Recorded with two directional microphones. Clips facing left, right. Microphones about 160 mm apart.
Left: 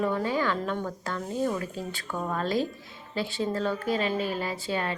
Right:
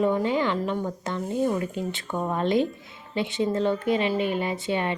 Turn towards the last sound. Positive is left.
turn(degrees=-20)  # may be behind; listen again after turning